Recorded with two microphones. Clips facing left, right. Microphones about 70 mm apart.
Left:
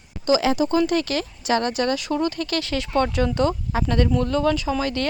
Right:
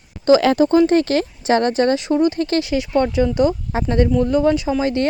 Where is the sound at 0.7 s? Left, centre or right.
Right.